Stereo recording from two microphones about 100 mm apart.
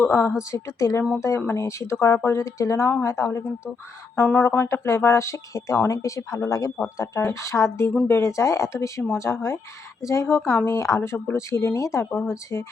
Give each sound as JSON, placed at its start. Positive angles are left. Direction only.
{"t": 0.0, "sound": "speech", "side_deg": 25}